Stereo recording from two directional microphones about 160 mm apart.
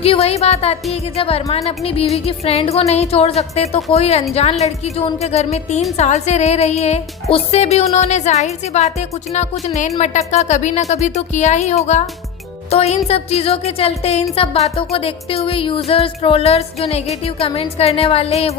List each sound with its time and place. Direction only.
0.0 s speech: 40° left (ahead or behind)